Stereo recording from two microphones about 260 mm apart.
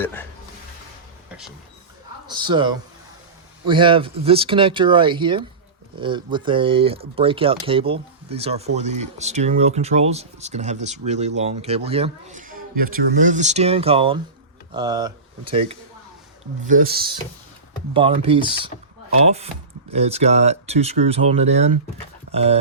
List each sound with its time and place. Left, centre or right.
0.0 s speech: centre
2.3 s a man's voice: centre
16.6 s speech: right
17.9 s speech: right
19.9 s speech: right